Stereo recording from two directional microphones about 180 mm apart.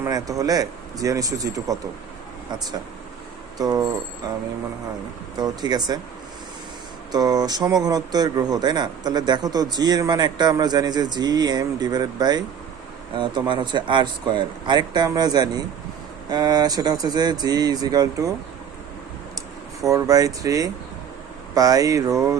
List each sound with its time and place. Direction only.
0.0 s speech: 20° right (ahead or behind)
3.6 s speech: 20° right (ahead or behind)
7.1 s speech: 20° right (ahead or behind)
19.8 s speech: 20° right (ahead or behind)